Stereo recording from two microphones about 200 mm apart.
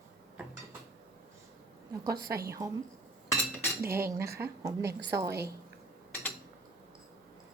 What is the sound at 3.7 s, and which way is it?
Cutlery, 10° right (ahead or behind).